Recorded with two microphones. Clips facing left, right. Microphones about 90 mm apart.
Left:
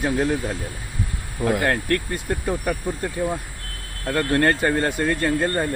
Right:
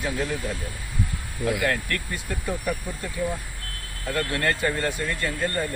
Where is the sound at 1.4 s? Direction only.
45° left (ahead or behind).